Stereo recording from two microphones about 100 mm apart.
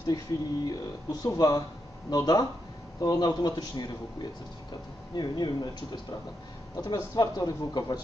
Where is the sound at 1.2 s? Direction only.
35° left (ahead or behind).